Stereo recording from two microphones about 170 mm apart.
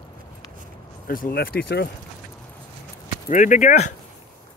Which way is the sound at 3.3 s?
45° left (ahead or behind).